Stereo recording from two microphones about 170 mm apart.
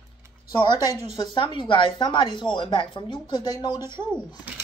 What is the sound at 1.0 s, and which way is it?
Speech, 30° left (ahead or behind).